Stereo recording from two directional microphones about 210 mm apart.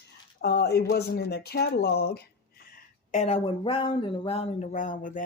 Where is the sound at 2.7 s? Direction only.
35° left (ahead or behind).